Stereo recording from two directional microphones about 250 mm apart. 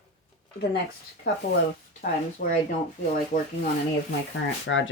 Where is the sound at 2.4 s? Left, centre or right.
Left.